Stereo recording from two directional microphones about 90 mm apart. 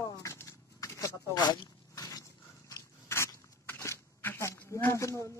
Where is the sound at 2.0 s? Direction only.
40° left (ahead or behind).